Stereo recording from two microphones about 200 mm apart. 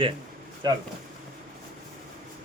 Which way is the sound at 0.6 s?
20° right (ahead or behind).